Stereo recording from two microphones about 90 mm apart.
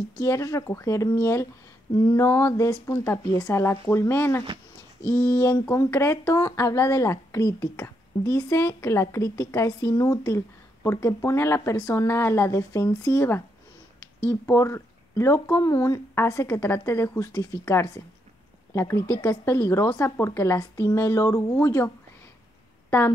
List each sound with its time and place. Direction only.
0.2 s a woman's voice: 35° left (ahead or behind)
1.9 s a sound: 50° left (ahead or behind)
2.1 s a woman's voice: 35° left (ahead or behind)
14.4 s a woman's voice: 25° left (ahead or behind)